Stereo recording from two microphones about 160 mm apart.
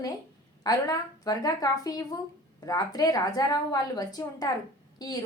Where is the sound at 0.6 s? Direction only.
25° left (ahead or behind).